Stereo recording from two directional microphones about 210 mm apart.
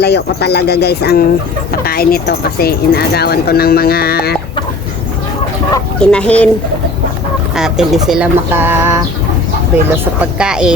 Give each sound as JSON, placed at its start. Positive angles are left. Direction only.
{"t": 0.0, "sound": "speech", "side_deg": 50}
{"t": 6.0, "sound": "speech", "side_deg": 5}
{"t": 7.5, "sound": "speech", "side_deg": 0}
{"t": 10.2, "sound": "speech", "side_deg": -5}